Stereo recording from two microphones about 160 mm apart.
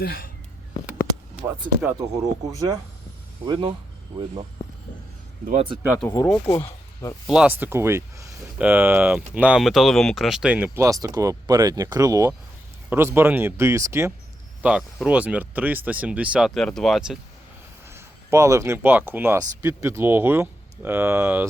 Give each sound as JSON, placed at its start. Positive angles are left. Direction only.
{"t": 0.0, "sound": "speech", "side_deg": 70}
{"t": 2.0, "sound": "speech", "side_deg": -25}
{"t": 6.1, "sound": "speech", "side_deg": 15}
{"t": 6.5, "sound": "a sound", "side_deg": 30}
{"t": 7.3, "sound": "speech", "side_deg": -10}
{"t": 10.8, "sound": "speech", "side_deg": -20}
{"t": 14.6, "sound": "speech", "side_deg": -5}
{"t": 17.8, "sound": "speech", "side_deg": -15}